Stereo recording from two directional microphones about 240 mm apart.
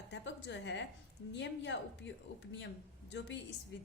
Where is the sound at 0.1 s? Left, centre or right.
Left.